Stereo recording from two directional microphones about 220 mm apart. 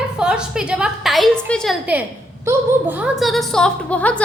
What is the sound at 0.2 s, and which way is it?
A woman's voice, 5° right (ahead or behind).